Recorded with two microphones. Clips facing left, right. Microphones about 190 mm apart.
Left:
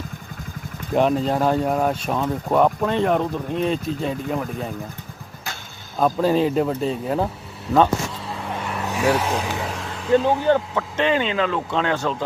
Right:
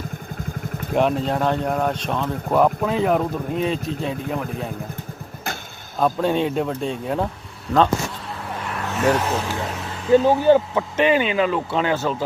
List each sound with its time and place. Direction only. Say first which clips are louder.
0.9 s speech: left 1 dB; centre (ahead or behind)
6.0 s speech: left 1 dB; centre (ahead or behind)
8.5 s vehicle: left 1 dB; 5° left (ahead or behind)
8.9 s speech: right 1 dB; 10° left (ahead or behind)